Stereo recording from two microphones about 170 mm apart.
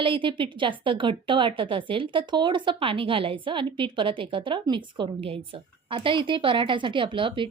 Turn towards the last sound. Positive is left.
turn(degrees=-30)  # may be behind; listen again after turning